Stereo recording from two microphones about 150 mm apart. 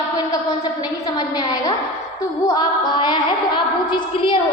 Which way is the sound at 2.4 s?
25° left (ahead or behind).